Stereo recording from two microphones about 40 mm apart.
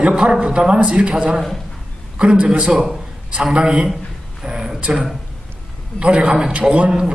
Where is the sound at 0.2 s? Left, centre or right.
Centre.